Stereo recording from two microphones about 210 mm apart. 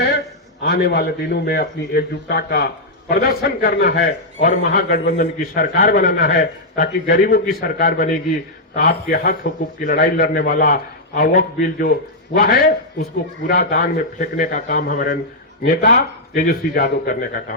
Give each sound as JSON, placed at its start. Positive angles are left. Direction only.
{"t": 0.6, "sound": "a man's voice", "side_deg": 50}